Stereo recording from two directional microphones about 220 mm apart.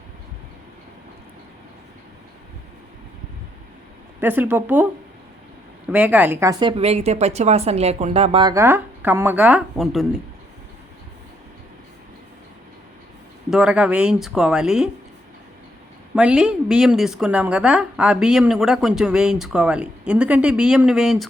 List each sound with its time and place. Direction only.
4.2 s a woman's voice: 10° right (ahead or behind)
5.9 s a woman's voice: 10° right (ahead or behind)
13.5 s a woman's voice: 5° right (ahead or behind)
16.1 s a woman's voice: 5° right (ahead or behind)